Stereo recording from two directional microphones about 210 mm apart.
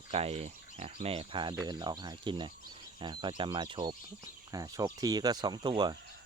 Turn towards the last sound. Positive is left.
turn(degrees=-20)  # may be behind; listen again after turning